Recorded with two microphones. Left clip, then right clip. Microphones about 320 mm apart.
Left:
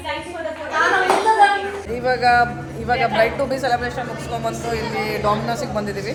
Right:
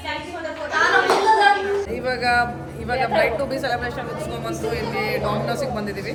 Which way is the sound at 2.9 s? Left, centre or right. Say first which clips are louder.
Left 2 dB; centre.